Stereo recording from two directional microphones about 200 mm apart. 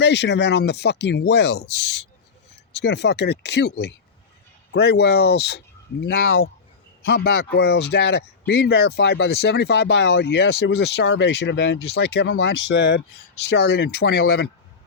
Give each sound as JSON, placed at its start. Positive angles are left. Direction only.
{"t": 0.0, "sound": "a man's voice", "side_deg": 60}
{"t": 2.7, "sound": "a man's voice", "side_deg": 60}
{"t": 7.0, "sound": "a man's voice", "side_deg": 50}